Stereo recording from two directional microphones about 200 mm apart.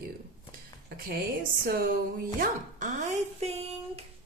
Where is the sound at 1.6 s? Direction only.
45° right (ahead or behind).